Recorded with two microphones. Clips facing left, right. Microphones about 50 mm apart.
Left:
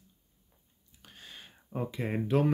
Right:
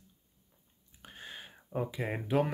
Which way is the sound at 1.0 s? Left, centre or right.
Right.